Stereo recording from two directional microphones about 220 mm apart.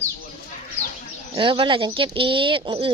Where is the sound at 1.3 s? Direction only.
25° right (ahead or behind).